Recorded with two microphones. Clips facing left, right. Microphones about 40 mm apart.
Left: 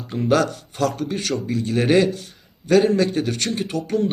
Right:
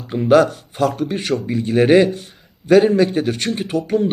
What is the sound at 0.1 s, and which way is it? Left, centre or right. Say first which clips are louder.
A man's voice: right 6 dB; centre.